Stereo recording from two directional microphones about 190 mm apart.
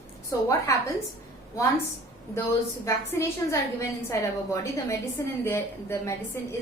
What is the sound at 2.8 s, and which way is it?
A woman's voice, 15° left (ahead or behind).